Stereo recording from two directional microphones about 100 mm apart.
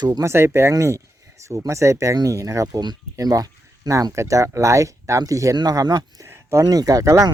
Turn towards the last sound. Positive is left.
turn(degrees=-30)  # may be behind; listen again after turning